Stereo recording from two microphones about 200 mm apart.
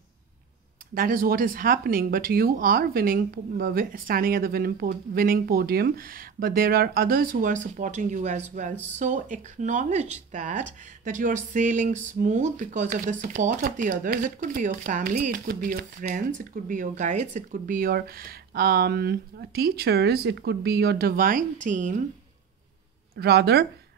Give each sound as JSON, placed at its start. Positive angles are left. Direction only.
{"t": 0.9, "sound": "speech", "side_deg": -45}
{"t": 23.1, "sound": "speech", "side_deg": -55}